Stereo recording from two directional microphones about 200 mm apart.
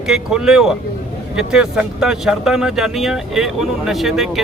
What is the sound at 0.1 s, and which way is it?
Speech, 5° right (ahead or behind).